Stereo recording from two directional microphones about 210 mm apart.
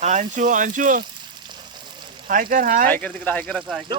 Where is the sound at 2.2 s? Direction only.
40° right (ahead or behind).